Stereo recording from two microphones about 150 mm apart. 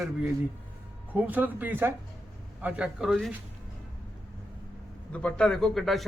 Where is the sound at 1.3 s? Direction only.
10° right (ahead or behind).